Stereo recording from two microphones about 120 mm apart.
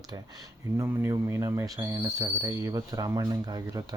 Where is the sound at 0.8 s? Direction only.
25° right (ahead or behind).